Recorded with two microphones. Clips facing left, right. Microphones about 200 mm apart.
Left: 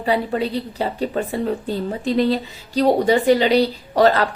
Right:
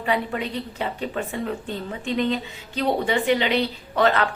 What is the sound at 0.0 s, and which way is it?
Speech, 35° left (ahead or behind).